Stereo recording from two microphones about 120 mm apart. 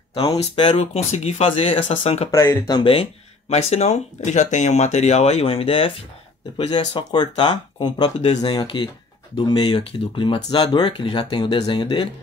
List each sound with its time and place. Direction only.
0.6 s speech: 45° left (ahead or behind)
0.9 s speech: 65° left (ahead or behind)
2.3 s speech: 25° left (ahead or behind)
2.7 s speech: 50° left (ahead or behind)
6.7 s speech: 40° left (ahead or behind)